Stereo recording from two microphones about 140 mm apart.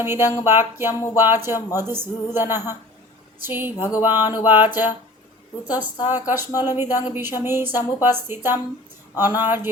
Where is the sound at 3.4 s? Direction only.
15° right (ahead or behind).